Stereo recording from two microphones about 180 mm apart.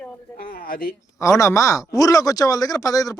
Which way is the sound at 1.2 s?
15° left (ahead or behind).